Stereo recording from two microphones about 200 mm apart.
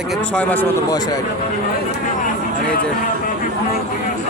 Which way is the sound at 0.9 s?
20° left (ahead or behind).